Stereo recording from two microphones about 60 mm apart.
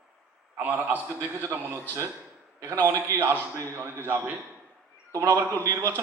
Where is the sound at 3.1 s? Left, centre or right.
Right.